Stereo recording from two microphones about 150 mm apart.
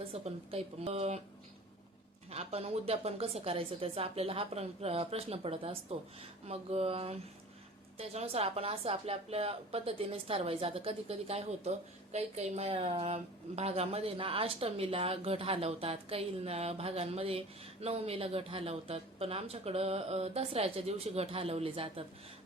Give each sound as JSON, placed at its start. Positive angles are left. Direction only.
{"t": 0.1, "sound": "speech", "side_deg": -40}
{"t": 2.3, "sound": "a woman's voice", "side_deg": -45}